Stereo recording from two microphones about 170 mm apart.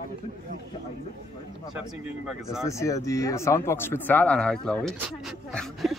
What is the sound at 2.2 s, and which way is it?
Speech, 5° right (ahead or behind).